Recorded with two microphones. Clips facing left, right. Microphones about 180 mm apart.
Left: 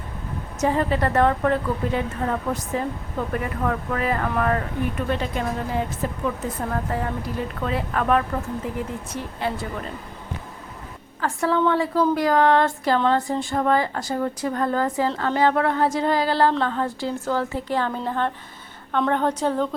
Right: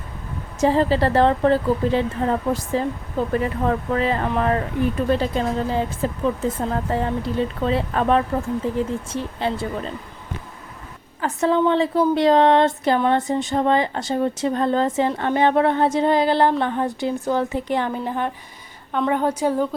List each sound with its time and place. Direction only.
0.6 s speech: 30° right (ahead or behind)
11.2 s a woman's voice: 20° right (ahead or behind)